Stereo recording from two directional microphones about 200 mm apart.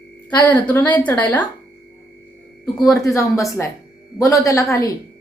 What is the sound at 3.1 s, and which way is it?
A man's voice, 15° left (ahead or behind).